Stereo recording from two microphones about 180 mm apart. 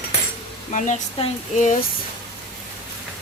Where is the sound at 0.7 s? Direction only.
45° left (ahead or behind).